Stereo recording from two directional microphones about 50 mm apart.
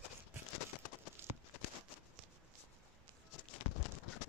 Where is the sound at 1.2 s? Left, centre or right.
Right.